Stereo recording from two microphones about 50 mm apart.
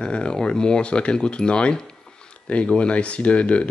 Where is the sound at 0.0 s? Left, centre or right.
Centre.